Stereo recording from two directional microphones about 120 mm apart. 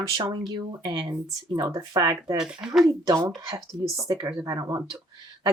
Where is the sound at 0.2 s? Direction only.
35° right (ahead or behind).